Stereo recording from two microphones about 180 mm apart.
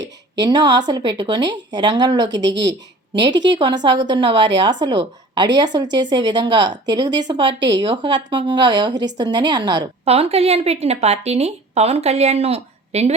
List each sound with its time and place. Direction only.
0.3 s speech: 25° right (ahead or behind)
3.3 s speech: 80° right
3.8 s speech: 25° right (ahead or behind)
10.1 s a woman's voice: 35° right (ahead or behind)